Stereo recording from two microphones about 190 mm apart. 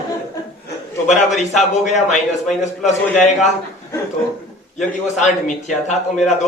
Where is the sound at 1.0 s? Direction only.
40° left (ahead or behind).